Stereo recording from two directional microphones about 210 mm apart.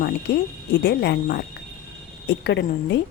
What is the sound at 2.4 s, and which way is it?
Speech, 55° left (ahead or behind).